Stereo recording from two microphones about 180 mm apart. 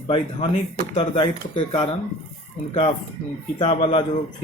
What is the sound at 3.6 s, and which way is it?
Speech, 30° left (ahead or behind).